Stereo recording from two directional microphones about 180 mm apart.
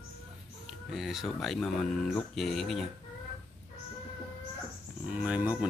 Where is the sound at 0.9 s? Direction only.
Centre (ahead or behind).